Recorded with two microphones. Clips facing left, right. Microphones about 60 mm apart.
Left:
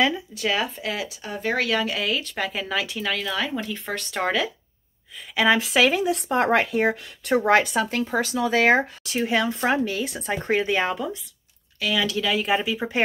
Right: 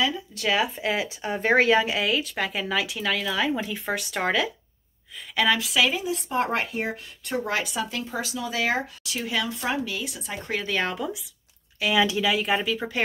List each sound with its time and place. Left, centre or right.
0.3 s speech: centre
0.7 s speech: right
2.0 s speech: centre
5.5 s speech: left
5.8 s speech: left
7.4 s speech: left
10.8 s speech: centre
11.8 s speech: centre
12.3 s speech: centre